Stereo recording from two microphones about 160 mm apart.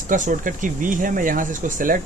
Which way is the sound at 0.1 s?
55° right (ahead or behind).